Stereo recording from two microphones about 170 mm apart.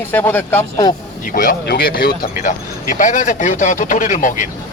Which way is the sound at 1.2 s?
55° left (ahead or behind).